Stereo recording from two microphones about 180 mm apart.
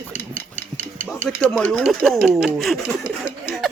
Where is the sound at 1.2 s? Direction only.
5° left (ahead or behind).